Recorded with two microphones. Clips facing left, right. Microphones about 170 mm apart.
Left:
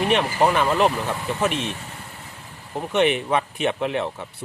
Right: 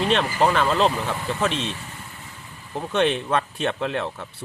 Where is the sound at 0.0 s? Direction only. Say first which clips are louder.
Left 1 dB; 15° left (ahead or behind).